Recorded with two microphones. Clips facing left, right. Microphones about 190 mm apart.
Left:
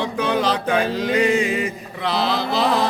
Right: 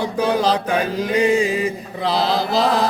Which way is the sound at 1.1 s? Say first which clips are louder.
Right 2 dB; 30° right (ahead or behind).